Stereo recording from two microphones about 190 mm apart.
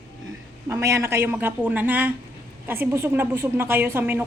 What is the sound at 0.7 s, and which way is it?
A woman's voice, 15° right (ahead or behind).